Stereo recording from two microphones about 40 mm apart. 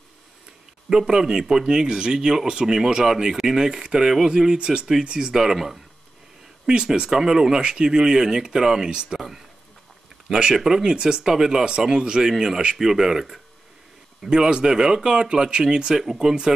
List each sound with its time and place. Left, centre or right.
0.8 s speech: centre
4.6 s speech: right
5.4 s speech: centre
6.9 s speech: centre
9.1 s a sound: centre
10.3 s speech: centre
10.9 s speech: right
14.2 s speech: right